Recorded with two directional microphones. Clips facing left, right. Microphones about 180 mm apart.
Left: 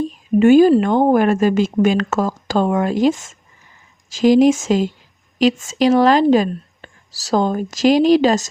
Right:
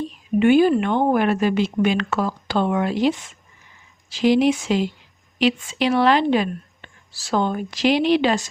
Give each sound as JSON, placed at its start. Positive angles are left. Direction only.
{"t": 0.0, "sound": "a woman's voice", "side_deg": 40}